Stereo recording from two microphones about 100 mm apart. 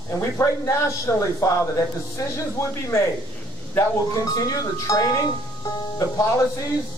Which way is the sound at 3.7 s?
35° left (ahead or behind).